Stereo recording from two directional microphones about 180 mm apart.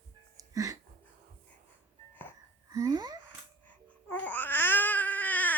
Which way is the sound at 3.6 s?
10° left (ahead or behind).